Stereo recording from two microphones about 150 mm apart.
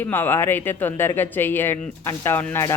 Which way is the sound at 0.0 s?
15° left (ahead or behind).